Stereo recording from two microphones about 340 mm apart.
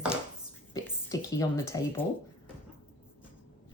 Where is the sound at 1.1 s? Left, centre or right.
Centre.